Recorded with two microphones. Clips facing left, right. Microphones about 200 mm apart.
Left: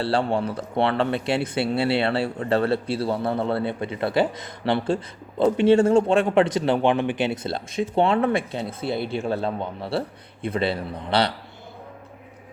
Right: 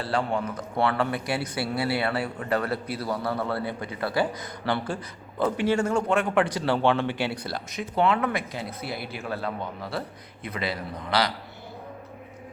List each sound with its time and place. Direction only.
0.0 s a man's voice: 30° left (ahead or behind)